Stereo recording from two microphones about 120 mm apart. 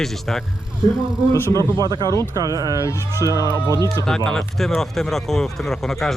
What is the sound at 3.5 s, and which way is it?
Speech, 25° left (ahead or behind).